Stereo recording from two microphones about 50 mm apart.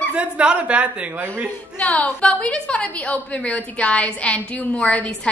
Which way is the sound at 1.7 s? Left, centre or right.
Left.